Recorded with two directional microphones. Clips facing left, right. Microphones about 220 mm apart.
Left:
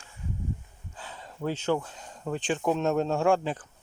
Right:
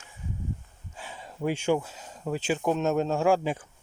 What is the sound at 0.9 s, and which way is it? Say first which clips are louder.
Speech: right 2 dB; 15° right (ahead or behind).